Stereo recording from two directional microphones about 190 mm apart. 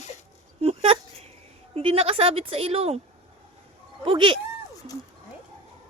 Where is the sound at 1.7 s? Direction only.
30° right (ahead or behind).